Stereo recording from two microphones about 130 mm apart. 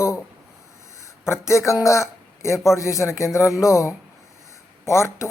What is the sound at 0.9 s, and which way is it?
A man's voice, 20° left (ahead or behind).